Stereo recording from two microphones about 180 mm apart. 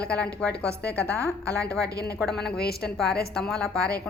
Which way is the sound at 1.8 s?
60° left (ahead or behind).